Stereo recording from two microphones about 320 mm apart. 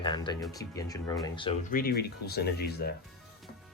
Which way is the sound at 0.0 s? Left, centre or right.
Centre.